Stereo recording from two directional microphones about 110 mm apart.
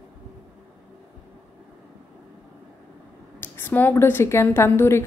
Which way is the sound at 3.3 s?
20° left (ahead or behind).